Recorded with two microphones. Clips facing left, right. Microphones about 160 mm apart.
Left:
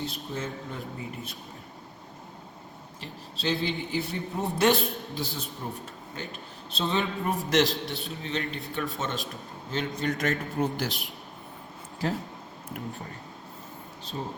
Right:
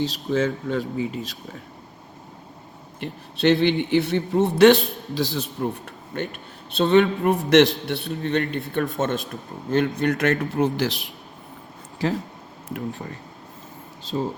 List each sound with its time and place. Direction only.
0.0 s speech: 90° right
3.0 s a man's voice: 65° right (ahead or behind)
8.0 s a man's voice: 60° right (ahead or behind); by 11.0 s 90° right
14.1 s a man's voice: 75° right (ahead or behind)